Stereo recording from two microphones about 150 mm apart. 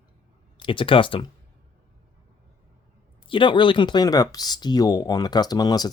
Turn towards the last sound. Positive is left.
turn(degrees=25)  # may be behind; listen again after turning